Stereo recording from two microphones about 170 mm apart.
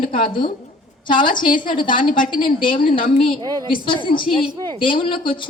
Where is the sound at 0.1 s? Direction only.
30° left (ahead or behind).